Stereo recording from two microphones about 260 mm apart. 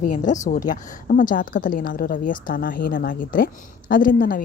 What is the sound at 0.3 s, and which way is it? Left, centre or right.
A woman's voice, left.